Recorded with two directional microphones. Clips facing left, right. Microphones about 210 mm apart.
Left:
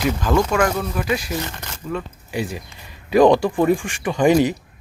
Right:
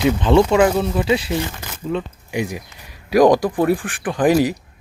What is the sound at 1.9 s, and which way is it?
Speech, 15° right (ahead or behind).